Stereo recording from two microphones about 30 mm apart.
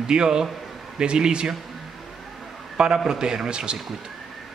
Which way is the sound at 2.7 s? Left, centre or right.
Right.